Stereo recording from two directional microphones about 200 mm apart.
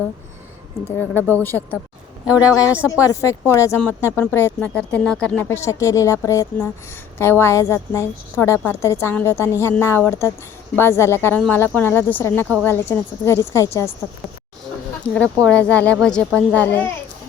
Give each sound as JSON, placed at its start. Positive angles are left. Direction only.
{"t": 0.9, "sound": "speech", "side_deg": 10}
{"t": 15.1, "sound": "speech", "side_deg": 5}